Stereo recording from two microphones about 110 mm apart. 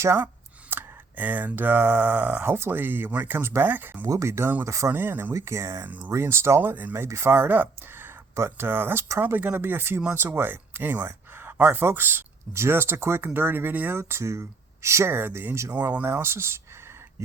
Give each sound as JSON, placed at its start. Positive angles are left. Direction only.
{"t": 0.0, "sound": "speech", "side_deg": -25}
{"t": 4.0, "sound": "speech", "side_deg": -30}
{"t": 15.7, "sound": "speech", "side_deg": -15}